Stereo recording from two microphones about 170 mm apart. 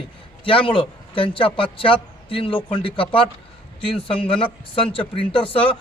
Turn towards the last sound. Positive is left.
turn(degrees=30)  # may be behind; listen again after turning